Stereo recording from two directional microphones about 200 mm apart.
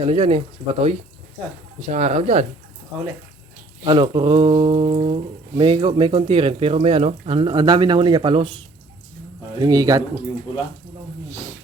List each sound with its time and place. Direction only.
0.0 s speech: 30° right (ahead or behind)
3.8 s speech: 25° right (ahead or behind)
9.6 s speech: 20° right (ahead or behind)